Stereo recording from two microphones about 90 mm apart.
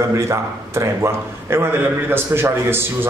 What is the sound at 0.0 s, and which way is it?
A man's voice, 35° right (ahead or behind).